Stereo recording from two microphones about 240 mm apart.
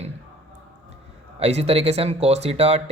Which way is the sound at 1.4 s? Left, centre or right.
Right.